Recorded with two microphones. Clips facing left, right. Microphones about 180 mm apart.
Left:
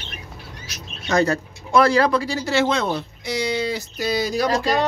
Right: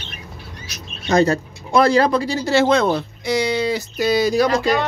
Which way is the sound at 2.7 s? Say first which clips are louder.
Right 6 dB; 50° right (ahead or behind).